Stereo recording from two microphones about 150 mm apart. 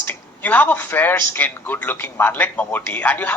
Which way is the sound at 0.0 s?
10° left (ahead or behind).